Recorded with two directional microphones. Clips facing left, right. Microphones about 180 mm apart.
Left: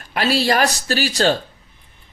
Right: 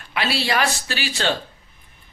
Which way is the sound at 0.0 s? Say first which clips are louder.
Left 5 dB; 40° left (ahead or behind).